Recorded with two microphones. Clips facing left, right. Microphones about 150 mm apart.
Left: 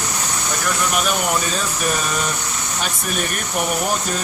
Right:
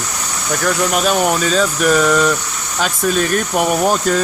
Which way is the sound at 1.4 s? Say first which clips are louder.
Right 8 dB; 90° right.